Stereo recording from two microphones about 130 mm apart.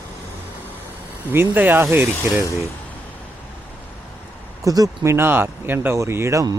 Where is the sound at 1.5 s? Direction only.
15° right (ahead or behind).